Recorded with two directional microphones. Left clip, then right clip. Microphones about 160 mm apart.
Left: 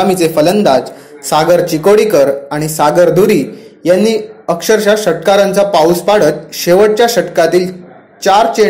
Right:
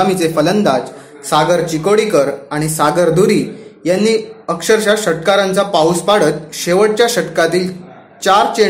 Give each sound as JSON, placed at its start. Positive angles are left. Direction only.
{"t": 0.0, "sound": "a man's voice", "side_deg": 15}
{"t": 1.2, "sound": "a man's voice", "side_deg": 25}